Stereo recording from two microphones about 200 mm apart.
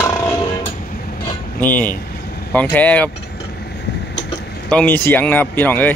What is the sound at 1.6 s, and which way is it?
A man's voice, 10° left (ahead or behind).